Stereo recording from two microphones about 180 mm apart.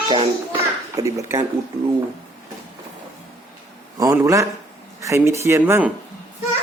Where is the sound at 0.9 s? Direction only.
15° right (ahead or behind).